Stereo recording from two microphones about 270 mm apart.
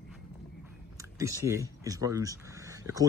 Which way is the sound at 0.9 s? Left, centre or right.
Centre.